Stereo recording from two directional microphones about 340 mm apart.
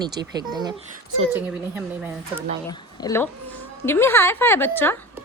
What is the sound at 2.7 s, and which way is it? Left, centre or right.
A woman's voice, centre.